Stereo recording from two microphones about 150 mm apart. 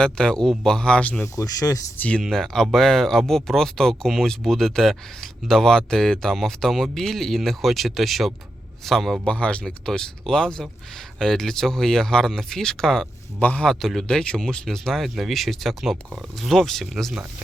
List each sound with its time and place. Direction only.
0.0 s speech: 5° left (ahead or behind)
1.4 s speech: 25° left (ahead or behind)
2.0 s speech: 5° left (ahead or behind)